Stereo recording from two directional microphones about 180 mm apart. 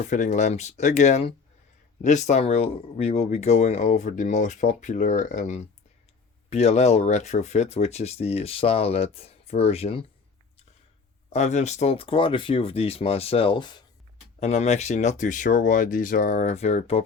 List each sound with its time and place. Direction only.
0.1 s speech: 40° left (ahead or behind)
11.3 s speech: 40° left (ahead or behind)
14.3 s speech: 35° left (ahead or behind)